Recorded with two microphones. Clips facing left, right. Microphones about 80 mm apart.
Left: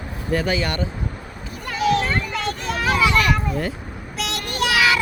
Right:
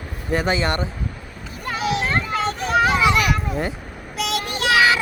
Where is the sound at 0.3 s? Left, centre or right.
Right.